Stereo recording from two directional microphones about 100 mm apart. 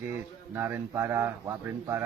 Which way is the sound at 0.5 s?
25° right (ahead or behind).